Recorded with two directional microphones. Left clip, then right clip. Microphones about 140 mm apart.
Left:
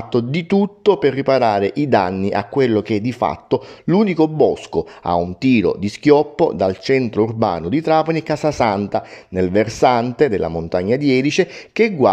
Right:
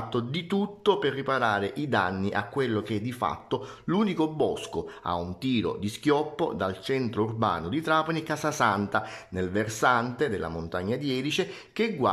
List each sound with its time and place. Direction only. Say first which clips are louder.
0.1 s speech: left 13 dB; 40° left (ahead or behind)